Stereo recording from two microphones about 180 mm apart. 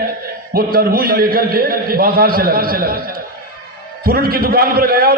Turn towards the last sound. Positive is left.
turn(degrees=-55)  # may be behind; listen again after turning